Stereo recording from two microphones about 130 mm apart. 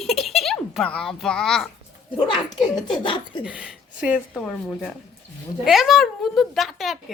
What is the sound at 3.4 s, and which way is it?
Speech, 5° right (ahead or behind).